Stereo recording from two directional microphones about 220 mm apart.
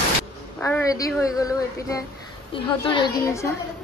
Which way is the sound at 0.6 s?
10° left (ahead or behind).